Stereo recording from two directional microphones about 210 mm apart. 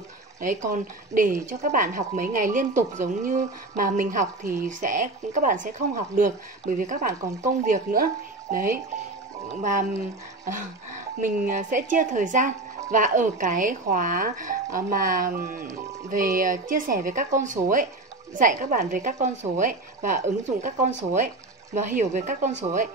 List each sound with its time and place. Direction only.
0.4 s speech: 40° right (ahead or behind)
7.1 s speech: 15° right (ahead or behind)
7.6 s speech: 40° right (ahead or behind)
11.1 s speech: 40° right (ahead or behind)
21.8 s speech: 35° right (ahead or behind)